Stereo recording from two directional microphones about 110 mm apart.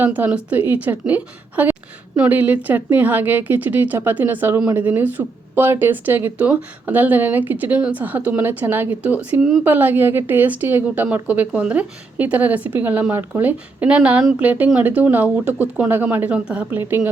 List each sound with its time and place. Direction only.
0.0 s a woman's voice: 15° right (ahead or behind)